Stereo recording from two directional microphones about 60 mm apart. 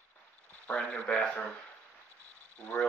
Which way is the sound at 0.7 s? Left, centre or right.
Left.